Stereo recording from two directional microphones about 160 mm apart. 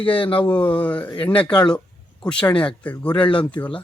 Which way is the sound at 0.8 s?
10° left (ahead or behind).